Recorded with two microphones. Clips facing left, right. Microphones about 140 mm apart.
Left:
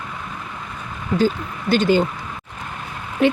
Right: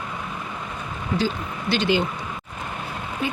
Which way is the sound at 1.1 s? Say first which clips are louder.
Left 6 dB; 45° left (ahead or behind).